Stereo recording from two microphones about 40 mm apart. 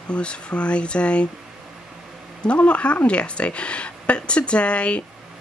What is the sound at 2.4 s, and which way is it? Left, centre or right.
Speech, left.